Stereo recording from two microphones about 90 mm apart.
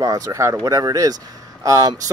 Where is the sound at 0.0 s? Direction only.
40° right (ahead or behind).